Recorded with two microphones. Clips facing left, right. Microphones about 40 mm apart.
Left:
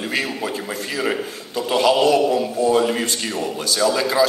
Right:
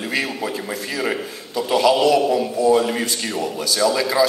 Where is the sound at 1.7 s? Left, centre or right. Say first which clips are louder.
Even; left.